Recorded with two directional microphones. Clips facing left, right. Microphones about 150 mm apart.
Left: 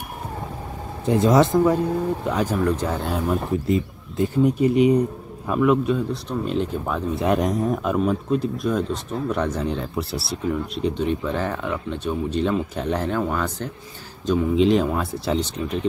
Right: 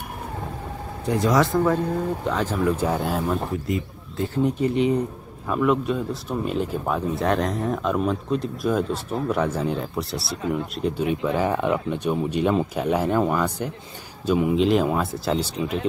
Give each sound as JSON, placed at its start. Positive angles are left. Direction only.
{"t": 1.0, "sound": "speech", "side_deg": 25}
{"t": 2.6, "sound": "speech", "side_deg": -10}
{"t": 3.6, "sound": "speech", "side_deg": 25}
{"t": 4.3, "sound": "speech", "side_deg": 10}
{"t": 7.2, "sound": "speech", "side_deg": 10}